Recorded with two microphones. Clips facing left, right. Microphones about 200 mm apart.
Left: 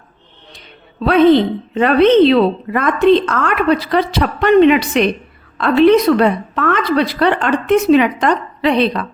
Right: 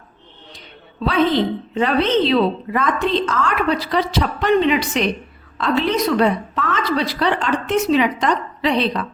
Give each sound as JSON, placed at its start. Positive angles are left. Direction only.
{"t": 1.0, "sound": "a woman's voice", "side_deg": 60}